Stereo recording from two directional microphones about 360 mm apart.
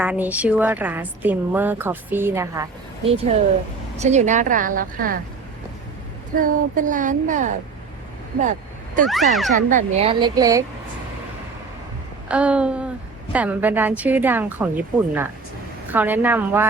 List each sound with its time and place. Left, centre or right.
0.0 s a woman's voice: centre
3.9 s a woman's voice: centre
6.3 s a woman's voice: right
9.0 s a woman's voice: centre
9.6 s speech: right
12.3 s a woman's voice: centre